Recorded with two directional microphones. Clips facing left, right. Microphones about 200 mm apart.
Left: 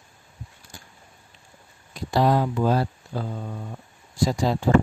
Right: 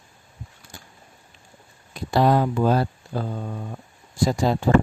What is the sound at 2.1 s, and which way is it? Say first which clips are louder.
Speech: right 2 dB; 55° right (ahead or behind).